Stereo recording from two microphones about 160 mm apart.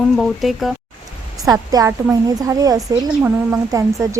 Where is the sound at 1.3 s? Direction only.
20° right (ahead or behind).